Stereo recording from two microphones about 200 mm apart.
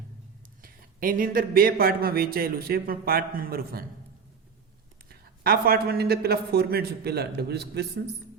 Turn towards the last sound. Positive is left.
turn(degrees=-55)  # may be behind; listen again after turning